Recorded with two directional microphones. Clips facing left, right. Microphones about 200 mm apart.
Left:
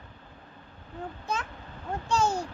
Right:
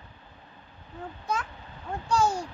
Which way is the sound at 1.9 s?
25° left (ahead or behind).